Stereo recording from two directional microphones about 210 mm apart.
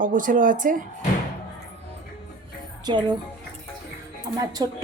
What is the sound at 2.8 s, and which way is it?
Speech, 20° right (ahead or behind).